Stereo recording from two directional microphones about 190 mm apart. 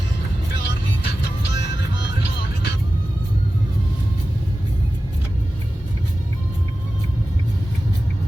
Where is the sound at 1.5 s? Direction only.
70° left (ahead or behind).